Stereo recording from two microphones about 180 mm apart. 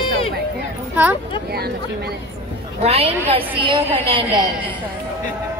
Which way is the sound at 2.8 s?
35° right (ahead or behind).